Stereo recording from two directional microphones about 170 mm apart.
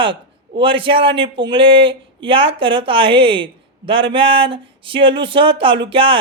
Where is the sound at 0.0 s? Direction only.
30° right (ahead or behind).